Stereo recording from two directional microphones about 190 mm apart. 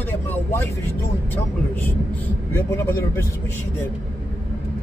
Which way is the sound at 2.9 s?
15° left (ahead or behind).